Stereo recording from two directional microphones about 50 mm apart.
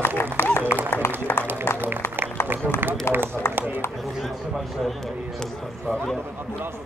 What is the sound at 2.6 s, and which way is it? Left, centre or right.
Speech, right.